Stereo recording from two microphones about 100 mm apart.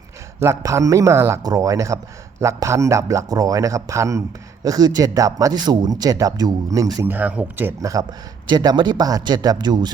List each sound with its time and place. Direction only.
0.4 s speech: 30° right (ahead or behind)
7.0 s speech: 20° right (ahead or behind)
7.8 s speech: 35° right (ahead or behind)
8.4 s speech: 45° right (ahead or behind)